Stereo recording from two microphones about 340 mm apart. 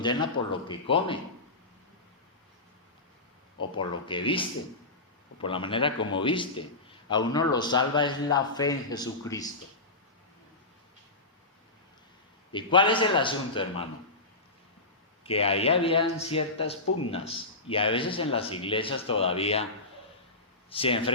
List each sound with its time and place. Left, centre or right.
0.0 s a man's voice: centre
3.8 s a man's voice: centre
12.5 s a man's voice: centre
15.2 s a man's voice: centre
16.8 s speech: left
17.1 s a man's voice: centre
20.7 s speech: centre